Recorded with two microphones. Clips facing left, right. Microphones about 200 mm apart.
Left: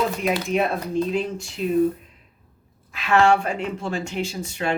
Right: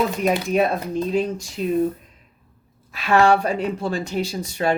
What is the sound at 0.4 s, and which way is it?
Speech, 40° right (ahead or behind).